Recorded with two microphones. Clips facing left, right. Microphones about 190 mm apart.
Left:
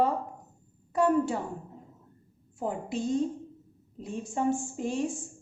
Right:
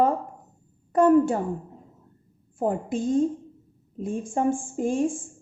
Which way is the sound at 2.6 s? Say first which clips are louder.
Right 6 dB; 50° right (ahead or behind).